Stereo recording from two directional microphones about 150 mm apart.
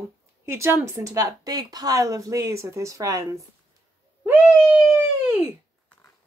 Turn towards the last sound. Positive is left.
turn(degrees=-10)  # may be behind; listen again after turning